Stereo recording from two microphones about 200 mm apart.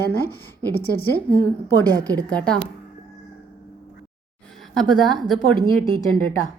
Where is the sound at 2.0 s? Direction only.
5° left (ahead or behind).